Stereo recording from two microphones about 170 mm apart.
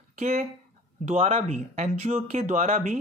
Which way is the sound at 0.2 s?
45° right (ahead or behind).